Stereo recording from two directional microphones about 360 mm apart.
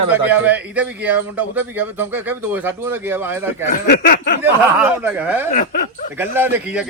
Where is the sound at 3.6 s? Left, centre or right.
Left.